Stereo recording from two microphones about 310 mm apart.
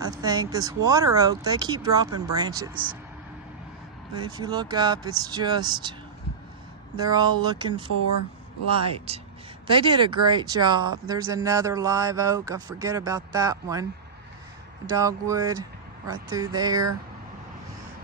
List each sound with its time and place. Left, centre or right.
0.0 s speech: centre
4.2 s speech: centre
7.0 s speech: centre
9.1 s speech: centre
15.0 s speech: centre